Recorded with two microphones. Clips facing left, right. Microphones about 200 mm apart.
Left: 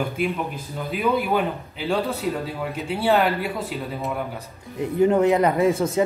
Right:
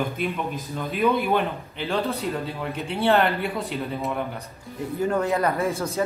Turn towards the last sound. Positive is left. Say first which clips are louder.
# left 6 dB
turn(degrees=20)  # may be behind; listen again after turning